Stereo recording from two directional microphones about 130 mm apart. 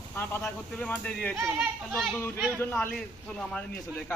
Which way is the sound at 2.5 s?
15° left (ahead or behind).